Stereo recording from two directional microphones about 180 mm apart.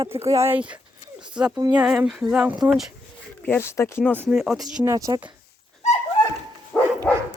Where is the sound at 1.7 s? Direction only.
5° right (ahead or behind).